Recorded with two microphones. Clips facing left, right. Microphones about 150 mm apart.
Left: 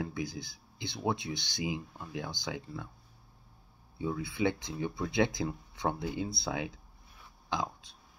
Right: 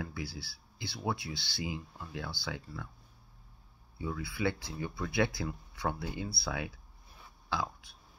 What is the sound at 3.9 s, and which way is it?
Speech, 20° left (ahead or behind).